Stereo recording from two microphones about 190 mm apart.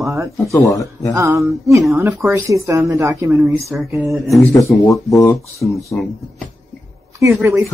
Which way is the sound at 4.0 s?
Centre (ahead or behind).